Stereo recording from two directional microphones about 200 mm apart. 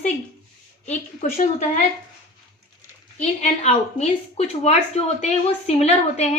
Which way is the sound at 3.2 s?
35° left (ahead or behind).